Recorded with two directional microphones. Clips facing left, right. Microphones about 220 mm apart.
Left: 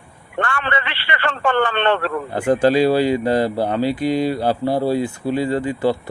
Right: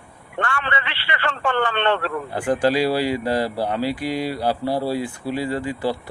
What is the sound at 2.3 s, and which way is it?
Speech, 25° left (ahead or behind).